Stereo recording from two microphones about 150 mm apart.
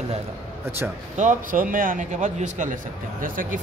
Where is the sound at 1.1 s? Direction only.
60° right (ahead or behind).